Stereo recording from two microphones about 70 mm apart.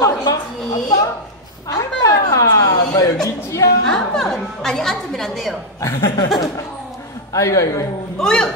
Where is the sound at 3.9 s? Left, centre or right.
Centre.